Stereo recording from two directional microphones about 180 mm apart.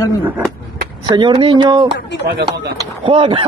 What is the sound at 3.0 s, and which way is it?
Speech, 30° right (ahead or behind).